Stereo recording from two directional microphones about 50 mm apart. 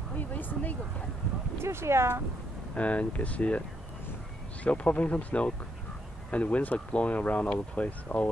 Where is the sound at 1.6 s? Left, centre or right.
Right.